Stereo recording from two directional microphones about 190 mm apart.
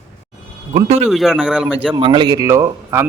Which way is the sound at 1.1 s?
Centre (ahead or behind).